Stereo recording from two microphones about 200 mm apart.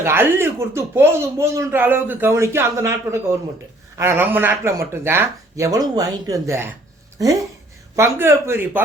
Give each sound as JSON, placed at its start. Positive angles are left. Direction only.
{"t": 0.0, "sound": "speech", "side_deg": -10}